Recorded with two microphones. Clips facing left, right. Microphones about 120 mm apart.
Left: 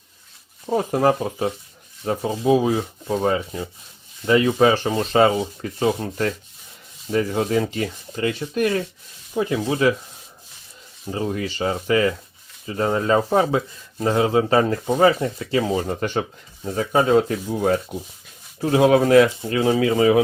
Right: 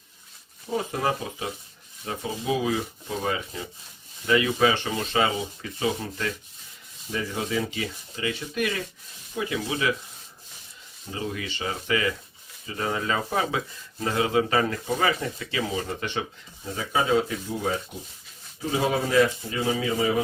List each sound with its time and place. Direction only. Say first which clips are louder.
0.7 s speech: left 8 dB; 45° left (ahead or behind)
11.1 s speech: left 7 dB; 40° left (ahead or behind); by 17.7 s 55° left (ahead or behind)
18.6 s speech: left 9 dB; 70° left (ahead or behind)